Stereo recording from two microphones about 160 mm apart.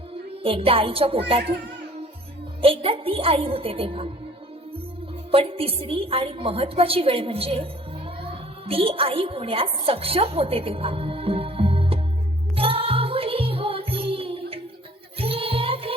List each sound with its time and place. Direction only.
0.4 s a woman's voice: 35° right (ahead or behind)
2.6 s a woman's voice: 35° right (ahead or behind)
5.3 s a woman's voice: 35° right (ahead or behind)
12.5 s music: 35° right (ahead or behind)